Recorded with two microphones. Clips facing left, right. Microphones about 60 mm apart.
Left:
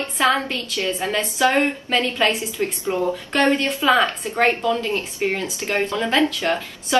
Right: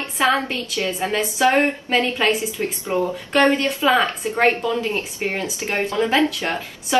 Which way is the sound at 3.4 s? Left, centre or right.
Right.